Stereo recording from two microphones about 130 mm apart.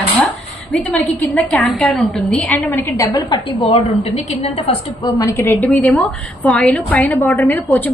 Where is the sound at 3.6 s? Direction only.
50° left (ahead or behind).